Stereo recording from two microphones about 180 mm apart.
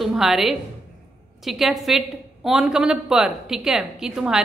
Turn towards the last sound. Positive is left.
turn(degrees=-5)  # may be behind; listen again after turning